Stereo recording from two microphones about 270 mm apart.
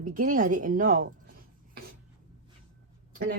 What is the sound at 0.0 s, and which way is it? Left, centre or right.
Speech, right.